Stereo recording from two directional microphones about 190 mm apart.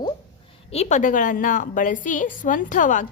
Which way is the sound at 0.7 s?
35° left (ahead or behind).